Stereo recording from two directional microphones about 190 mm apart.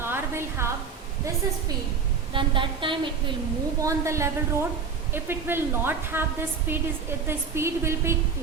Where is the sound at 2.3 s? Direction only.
25° right (ahead or behind).